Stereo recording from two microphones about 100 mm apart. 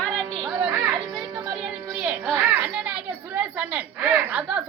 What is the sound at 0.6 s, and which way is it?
Children playing, 5° right (ahead or behind).